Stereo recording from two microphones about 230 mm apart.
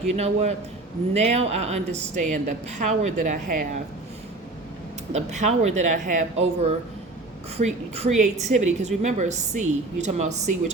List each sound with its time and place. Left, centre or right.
0.1 s a woman's voice: right
5.1 s a woman's voice: right